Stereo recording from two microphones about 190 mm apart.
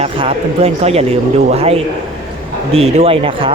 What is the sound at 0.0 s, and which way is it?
Speech, 30° right (ahead or behind).